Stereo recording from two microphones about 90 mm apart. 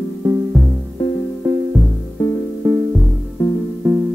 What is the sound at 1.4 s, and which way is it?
Music, 20° right (ahead or behind).